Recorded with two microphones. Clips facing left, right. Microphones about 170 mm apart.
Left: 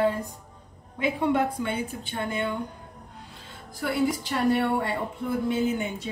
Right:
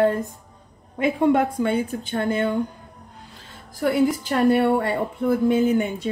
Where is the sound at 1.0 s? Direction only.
50° right (ahead or behind).